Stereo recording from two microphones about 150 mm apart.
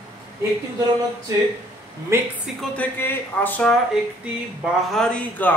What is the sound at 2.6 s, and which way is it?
Speech, 10° left (ahead or behind).